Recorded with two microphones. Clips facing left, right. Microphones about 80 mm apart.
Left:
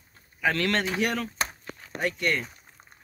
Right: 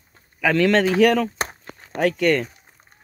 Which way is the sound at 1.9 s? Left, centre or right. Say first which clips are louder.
Right 9 dB; right.